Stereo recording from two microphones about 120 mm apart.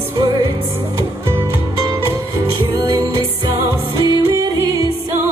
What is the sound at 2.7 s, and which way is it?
Music, 30° right (ahead or behind).